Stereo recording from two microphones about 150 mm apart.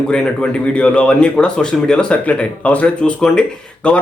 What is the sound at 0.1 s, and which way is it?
Speech, 5° left (ahead or behind).